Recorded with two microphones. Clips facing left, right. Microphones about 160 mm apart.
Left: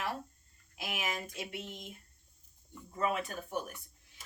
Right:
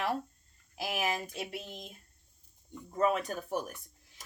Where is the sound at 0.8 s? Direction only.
35° right (ahead or behind).